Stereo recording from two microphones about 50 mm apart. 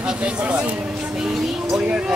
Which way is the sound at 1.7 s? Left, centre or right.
Centre.